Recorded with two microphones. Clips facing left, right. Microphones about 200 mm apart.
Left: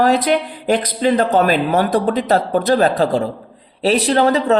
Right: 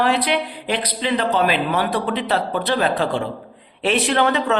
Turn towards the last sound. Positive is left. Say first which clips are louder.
# left 4 dB
turn(degrees=35)  # may be behind; listen again after turning